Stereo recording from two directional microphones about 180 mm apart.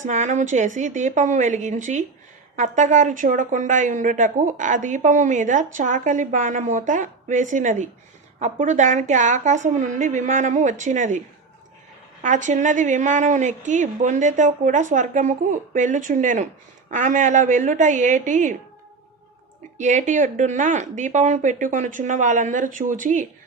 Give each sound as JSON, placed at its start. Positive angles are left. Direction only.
{"t": 0.0, "sound": "speech", "side_deg": -40}
{"t": 12.2, "sound": "speech", "side_deg": -45}
{"t": 19.7, "sound": "speech", "side_deg": -40}